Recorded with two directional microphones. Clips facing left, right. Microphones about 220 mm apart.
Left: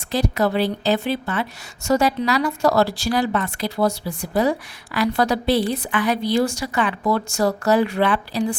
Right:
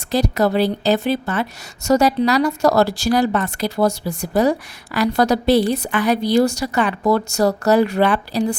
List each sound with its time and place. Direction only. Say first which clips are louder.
0.1 s a woman's voice: right 3 dB; 40° right (ahead or behind)